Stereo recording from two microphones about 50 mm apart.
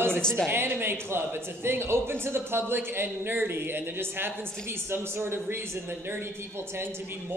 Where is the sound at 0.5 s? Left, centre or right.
Right.